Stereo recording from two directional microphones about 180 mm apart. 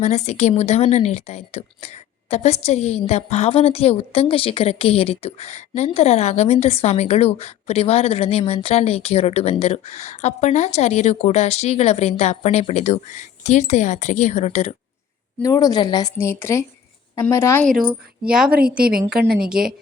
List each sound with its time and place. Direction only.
0.0 s speech: 40° left (ahead or behind)
15.4 s a woman's voice: 20° left (ahead or behind)
17.7 s speech: 5° right (ahead or behind)
18.8 s a woman's voice: 55° right (ahead or behind)
19.1 s speech: 5° right (ahead or behind)